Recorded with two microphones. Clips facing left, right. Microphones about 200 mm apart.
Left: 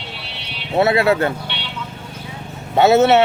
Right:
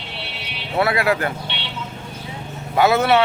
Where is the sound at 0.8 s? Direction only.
25° left (ahead or behind).